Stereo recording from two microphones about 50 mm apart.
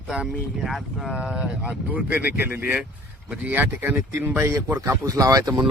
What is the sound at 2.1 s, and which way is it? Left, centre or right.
Speech, right.